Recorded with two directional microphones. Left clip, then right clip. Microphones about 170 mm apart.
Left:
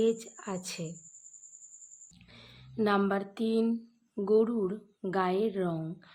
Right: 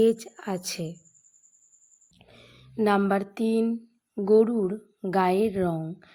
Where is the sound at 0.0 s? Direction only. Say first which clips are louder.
Right 6 dB; 30° right (ahead or behind).